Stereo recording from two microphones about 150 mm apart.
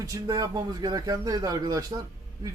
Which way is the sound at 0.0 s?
20° right (ahead or behind).